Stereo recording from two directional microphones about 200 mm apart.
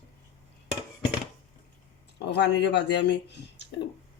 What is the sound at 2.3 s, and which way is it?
Speech, 60° left (ahead or behind).